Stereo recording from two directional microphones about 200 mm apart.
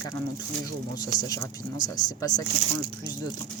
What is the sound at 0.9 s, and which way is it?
Speech, 20° left (ahead or behind).